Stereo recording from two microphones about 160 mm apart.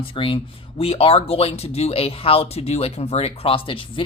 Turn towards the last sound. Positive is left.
turn(degrees=35)  # may be behind; listen again after turning